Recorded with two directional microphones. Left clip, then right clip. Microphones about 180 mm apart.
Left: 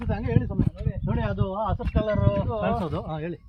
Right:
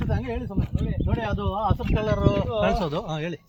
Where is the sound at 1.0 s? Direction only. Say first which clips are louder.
Even; 15° right (ahead or behind).